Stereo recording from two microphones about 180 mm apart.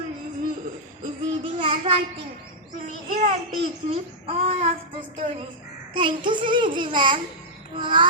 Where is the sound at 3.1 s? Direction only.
45° right (ahead or behind).